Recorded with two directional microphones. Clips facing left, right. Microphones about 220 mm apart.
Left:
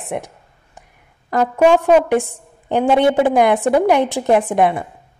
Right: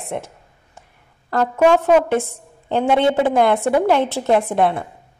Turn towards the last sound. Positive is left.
turn(degrees=15)  # may be behind; listen again after turning